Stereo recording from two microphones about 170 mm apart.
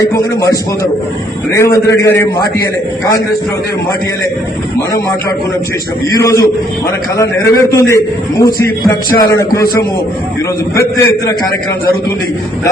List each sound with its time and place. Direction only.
1.5 s a man's voice: 15° left (ahead or behind)
6.1 s a man's voice: 20° left (ahead or behind)